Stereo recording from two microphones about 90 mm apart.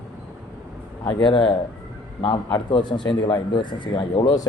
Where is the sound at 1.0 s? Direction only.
65° left (ahead or behind).